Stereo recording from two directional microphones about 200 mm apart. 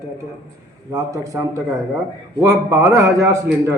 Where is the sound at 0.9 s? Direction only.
15° right (ahead or behind).